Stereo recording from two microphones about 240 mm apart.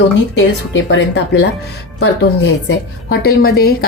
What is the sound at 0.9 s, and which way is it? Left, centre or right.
Speech, left.